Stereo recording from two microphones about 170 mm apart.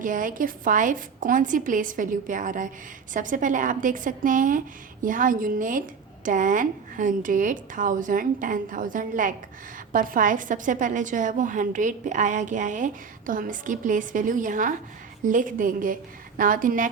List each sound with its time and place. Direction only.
0.0 s a woman's voice: 50° right (ahead or behind)